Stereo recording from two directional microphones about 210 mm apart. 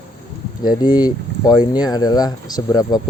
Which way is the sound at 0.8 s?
20° left (ahead or behind).